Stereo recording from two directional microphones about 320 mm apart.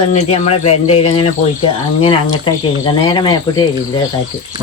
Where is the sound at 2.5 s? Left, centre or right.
Centre.